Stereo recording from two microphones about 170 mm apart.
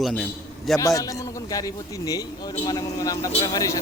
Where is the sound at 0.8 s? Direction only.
20° left (ahead or behind).